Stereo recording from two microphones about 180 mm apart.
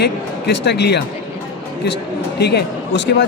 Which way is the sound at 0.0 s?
70° left (ahead or behind).